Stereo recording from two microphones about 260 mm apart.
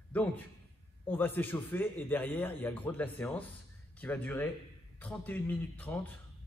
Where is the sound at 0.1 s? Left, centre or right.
Centre.